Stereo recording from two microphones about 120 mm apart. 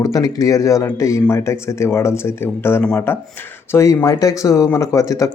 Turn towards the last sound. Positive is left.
turn(degrees=25)  # may be behind; listen again after turning